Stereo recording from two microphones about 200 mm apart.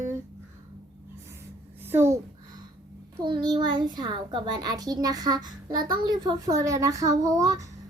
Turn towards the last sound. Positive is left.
turn(degrees=-15)  # may be behind; listen again after turning